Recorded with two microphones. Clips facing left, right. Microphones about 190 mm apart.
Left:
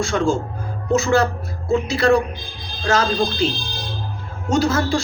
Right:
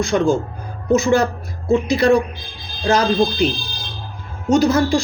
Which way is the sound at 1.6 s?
15° right (ahead or behind).